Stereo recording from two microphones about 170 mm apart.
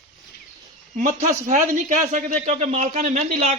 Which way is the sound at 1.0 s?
45° right (ahead or behind).